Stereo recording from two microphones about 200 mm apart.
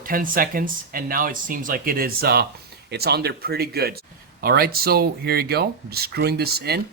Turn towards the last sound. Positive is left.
turn(degrees=-50)  # may be behind; listen again after turning